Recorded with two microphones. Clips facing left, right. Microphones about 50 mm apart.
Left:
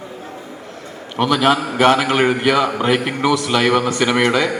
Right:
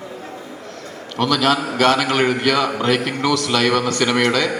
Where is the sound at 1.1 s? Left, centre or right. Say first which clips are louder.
Left 2 dB; left.